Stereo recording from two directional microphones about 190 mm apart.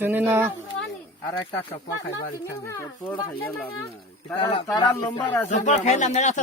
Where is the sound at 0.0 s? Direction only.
10° right (ahead or behind).